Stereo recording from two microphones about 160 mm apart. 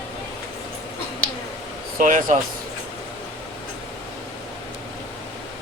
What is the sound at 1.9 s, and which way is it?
Speech, 55° right (ahead or behind).